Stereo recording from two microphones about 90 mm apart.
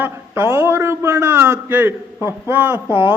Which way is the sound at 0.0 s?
25° right (ahead or behind).